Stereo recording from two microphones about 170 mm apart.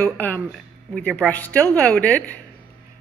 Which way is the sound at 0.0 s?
10° left (ahead or behind).